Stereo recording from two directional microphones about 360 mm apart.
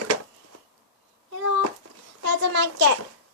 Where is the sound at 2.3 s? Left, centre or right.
Right.